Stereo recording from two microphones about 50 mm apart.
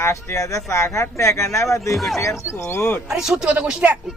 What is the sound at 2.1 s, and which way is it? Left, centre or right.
Speech, left.